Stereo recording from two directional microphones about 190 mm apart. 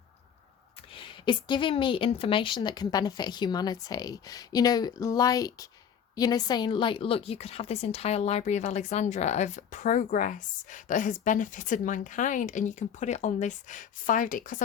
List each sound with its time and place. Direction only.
0.9 s a woman's voice: 25° left (ahead or behind); by 14.6 s 45° left (ahead or behind)